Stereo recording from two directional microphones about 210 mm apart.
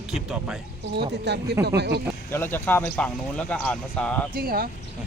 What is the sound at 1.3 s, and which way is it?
Speech, 50° right (ahead or behind).